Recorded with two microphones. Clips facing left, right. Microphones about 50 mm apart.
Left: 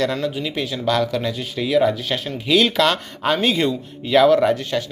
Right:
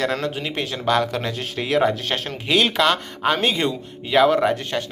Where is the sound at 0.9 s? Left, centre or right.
Right.